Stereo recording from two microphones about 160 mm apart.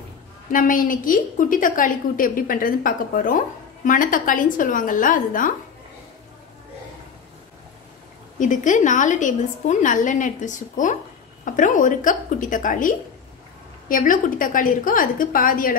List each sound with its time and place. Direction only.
0.5 s a woman's voice: 60° left (ahead or behind)
8.4 s a woman's voice: 50° left (ahead or behind)